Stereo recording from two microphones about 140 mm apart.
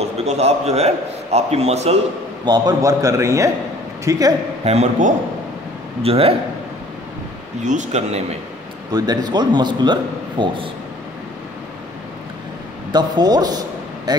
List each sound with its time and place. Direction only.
0.0 s a man's voice: 50° right (ahead or behind)
2.4 s a man's voice: 30° right (ahead or behind)
4.6 s a man's voice: 50° right (ahead or behind)
7.6 s speech: 60° right (ahead or behind)
8.9 s a man's voice: 30° right (ahead or behind)
12.9 s a man's voice: 30° right (ahead or behind)